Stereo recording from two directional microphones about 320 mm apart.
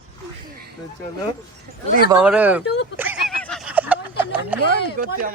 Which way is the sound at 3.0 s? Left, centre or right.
Centre.